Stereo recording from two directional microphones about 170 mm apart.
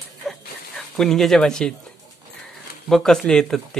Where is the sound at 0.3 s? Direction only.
5° left (ahead or behind).